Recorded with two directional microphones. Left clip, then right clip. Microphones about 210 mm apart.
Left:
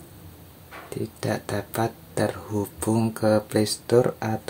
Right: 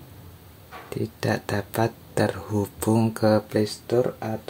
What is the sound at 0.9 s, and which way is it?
Speech, 10° right (ahead or behind).